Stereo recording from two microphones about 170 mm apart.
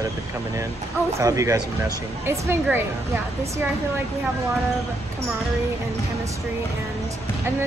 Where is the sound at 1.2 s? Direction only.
20° right (ahead or behind).